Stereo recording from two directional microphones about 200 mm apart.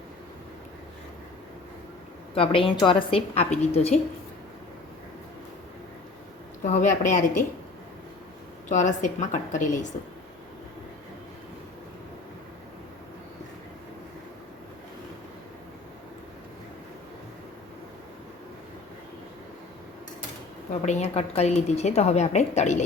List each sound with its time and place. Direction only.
2.3 s a woman's voice: 25° left (ahead or behind)
6.8 s a woman's voice: 40° left (ahead or behind)
8.7 s a woman's voice: 40° left (ahead or behind)
20.8 s a woman's voice: 30° left (ahead or behind)